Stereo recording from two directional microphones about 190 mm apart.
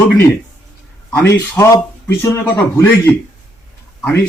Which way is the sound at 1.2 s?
15° left (ahead or behind).